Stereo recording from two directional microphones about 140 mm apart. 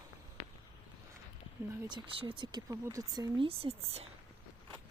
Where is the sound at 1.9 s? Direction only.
35° right (ahead or behind).